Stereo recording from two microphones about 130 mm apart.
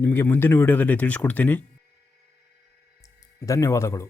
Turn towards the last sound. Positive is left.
turn(degrees=20)  # may be behind; listen again after turning